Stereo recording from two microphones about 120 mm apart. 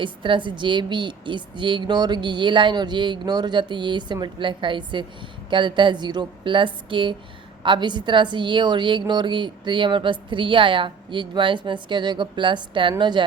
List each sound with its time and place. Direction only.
0.0 s a woman's voice: 45° right (ahead or behind)